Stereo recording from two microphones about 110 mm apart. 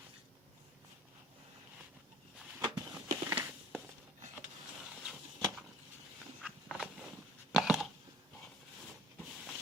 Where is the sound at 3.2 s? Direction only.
25° right (ahead or behind).